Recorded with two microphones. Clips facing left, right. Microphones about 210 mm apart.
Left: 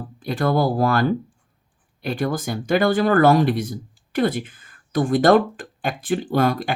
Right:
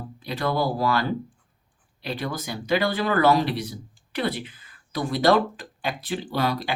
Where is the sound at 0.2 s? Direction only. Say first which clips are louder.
Left 5 dB; 50° left (ahead or behind).